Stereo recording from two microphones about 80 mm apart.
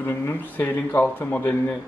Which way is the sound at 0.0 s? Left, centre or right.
Left.